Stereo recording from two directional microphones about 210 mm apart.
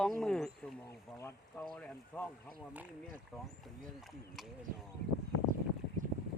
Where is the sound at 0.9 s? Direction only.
15° left (ahead or behind).